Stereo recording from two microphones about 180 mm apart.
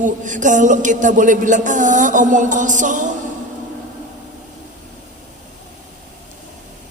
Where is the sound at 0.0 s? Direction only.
45° right (ahead or behind).